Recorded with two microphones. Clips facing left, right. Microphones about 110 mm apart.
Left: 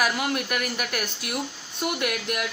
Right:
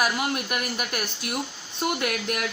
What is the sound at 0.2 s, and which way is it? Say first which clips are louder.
Speech: left 1 dB; 15° right (ahead or behind).